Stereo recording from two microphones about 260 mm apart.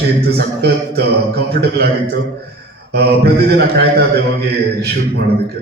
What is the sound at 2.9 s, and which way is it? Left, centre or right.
A man's voice, right.